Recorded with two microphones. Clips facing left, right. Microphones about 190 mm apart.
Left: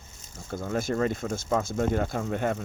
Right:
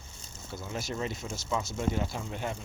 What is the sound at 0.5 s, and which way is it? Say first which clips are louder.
Speech: left 8 dB; 50° left (ahead or behind).